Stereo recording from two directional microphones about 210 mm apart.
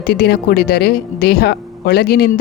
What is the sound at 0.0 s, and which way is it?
Speech, 50° left (ahead or behind).